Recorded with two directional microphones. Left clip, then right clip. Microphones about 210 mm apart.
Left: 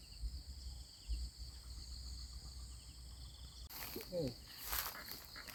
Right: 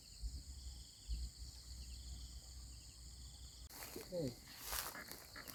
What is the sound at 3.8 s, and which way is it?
Cricket, 15° left (ahead or behind).